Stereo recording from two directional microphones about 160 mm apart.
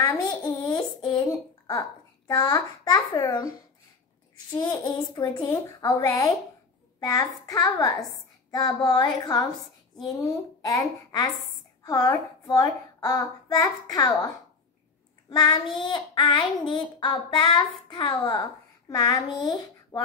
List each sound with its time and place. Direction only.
0.0 s a child's voice: 20° left (ahead or behind)
4.5 s child singing: 25° left (ahead or behind)
11.8 s a child's voice: 25° left (ahead or behind)
15.2 s child singing: 25° left (ahead or behind)